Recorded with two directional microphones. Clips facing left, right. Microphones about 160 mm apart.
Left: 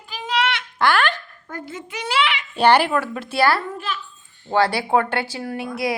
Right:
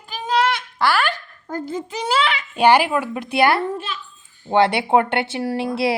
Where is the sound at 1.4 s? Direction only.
35° right (ahead or behind).